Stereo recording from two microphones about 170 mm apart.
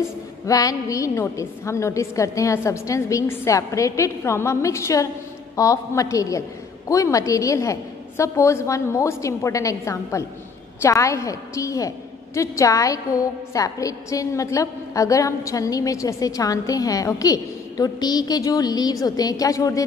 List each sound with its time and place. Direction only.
0.5 s a woman's voice: 20° left (ahead or behind)